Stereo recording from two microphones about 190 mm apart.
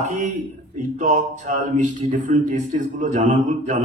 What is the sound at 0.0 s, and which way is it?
Speech, 40° right (ahead or behind).